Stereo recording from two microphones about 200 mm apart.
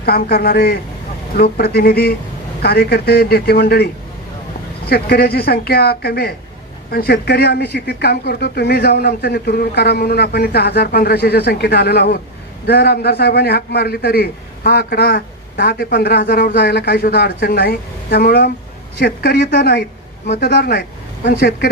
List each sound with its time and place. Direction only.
0.0 s a man's voice: 50° left (ahead or behind)
4.9 s a man's voice: 50° left (ahead or behind)